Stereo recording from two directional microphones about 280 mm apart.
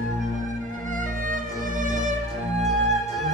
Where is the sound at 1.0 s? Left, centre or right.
Right.